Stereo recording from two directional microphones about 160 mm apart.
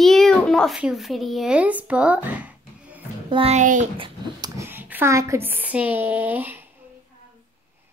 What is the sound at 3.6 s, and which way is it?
Speech, 50° right (ahead or behind).